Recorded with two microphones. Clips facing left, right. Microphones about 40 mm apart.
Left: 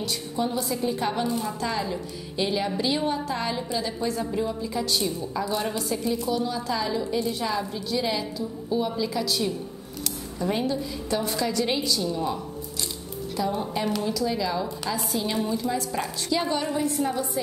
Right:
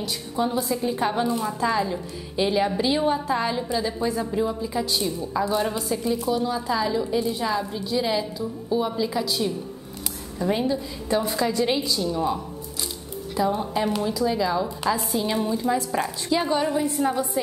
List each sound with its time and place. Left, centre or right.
0.0 s a woman's voice: centre
13.4 s a woman's voice: centre
16.0 s a woman's voice: centre